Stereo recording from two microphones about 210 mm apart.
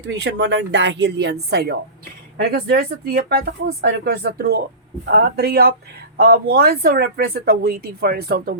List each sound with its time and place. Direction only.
0.1 s speech: 55° right (ahead or behind)